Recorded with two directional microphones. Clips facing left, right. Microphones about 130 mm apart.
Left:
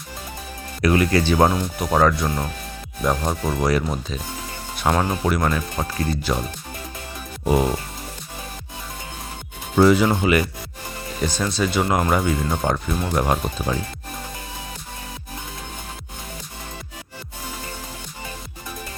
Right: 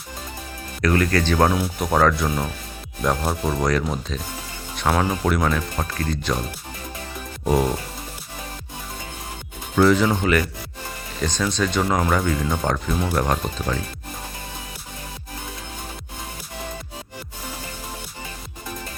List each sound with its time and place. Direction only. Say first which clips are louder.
0.8 s speech: left 2 dB; 10° left (ahead or behind)
1.5 s speech: right 1 dB; 5° right (ahead or behind)
1.9 s speech: left 1 dB; 5° left (ahead or behind)
3.2 s speech: even; 10° right (ahead or behind)
3.6 s speech: left 1 dB; 10° left (ahead or behind)
5.7 s speech: left 1 dB; 15° left (ahead or behind)
7.4 s music: left 1 dB; 5° left (ahead or behind)
9.7 s speech: left 1 dB; 10° left (ahead or behind)